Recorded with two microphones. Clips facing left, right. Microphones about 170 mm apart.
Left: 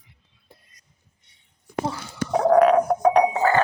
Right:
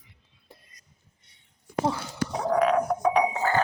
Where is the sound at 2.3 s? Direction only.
60° left (ahead or behind).